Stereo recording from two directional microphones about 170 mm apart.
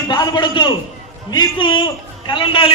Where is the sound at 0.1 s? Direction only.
25° left (ahead or behind).